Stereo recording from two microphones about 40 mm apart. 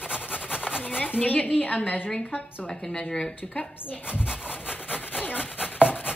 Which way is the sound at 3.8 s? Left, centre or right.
Left.